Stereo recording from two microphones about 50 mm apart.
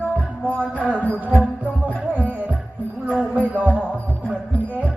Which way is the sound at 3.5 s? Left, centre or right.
Right.